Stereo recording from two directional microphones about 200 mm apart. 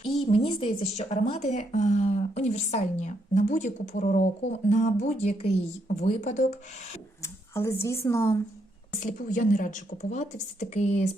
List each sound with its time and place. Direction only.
0.3 s speech: 30° left (ahead or behind)
7.2 s speech: 15° left (ahead or behind)
9.0 s speech: 40° left (ahead or behind)